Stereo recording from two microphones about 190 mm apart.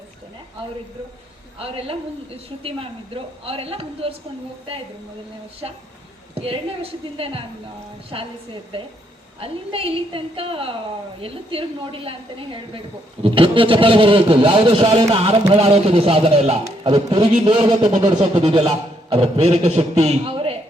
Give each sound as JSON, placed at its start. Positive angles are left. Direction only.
{"t": 1.5, "sound": "a woman's voice", "side_deg": -30}
{"t": 7.2, "sound": "a woman's voice", "side_deg": -30}
{"t": 13.2, "sound": "a man's voice", "side_deg": -30}